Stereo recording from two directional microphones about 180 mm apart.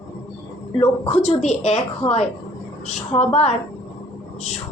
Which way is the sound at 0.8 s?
35° left (ahead or behind).